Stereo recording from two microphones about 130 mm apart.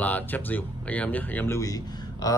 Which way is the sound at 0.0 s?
15° left (ahead or behind).